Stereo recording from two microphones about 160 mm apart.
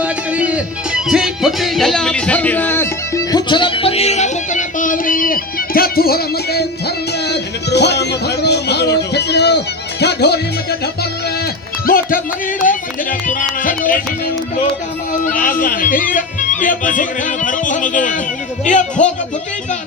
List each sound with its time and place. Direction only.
0.0 s music: 10° right (ahead or behind); by 2.9 s 15° left (ahead or behind)
3.3 s music: 30° left (ahead or behind); by 10.8 s 90° left
11.9 s speech: 65° left (ahead or behind)
15.3 s speech: 60° left (ahead or behind)